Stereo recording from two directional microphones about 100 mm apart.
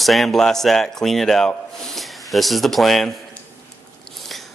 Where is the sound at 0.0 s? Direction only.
Centre (ahead or behind).